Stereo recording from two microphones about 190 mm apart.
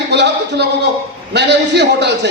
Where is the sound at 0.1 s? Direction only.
65° right (ahead or behind).